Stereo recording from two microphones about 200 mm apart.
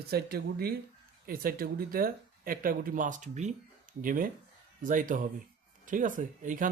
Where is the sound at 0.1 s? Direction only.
50° right (ahead or behind).